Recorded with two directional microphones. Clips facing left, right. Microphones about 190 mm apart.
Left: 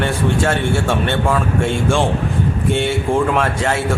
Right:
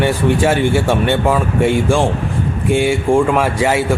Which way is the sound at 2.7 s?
Centre (ahead or behind).